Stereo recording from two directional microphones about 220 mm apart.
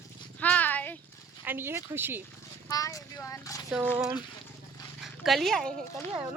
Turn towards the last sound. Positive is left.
turn(degrees=-5)  # may be behind; listen again after turning